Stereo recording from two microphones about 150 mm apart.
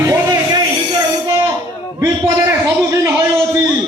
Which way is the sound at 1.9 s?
15° right (ahead or behind).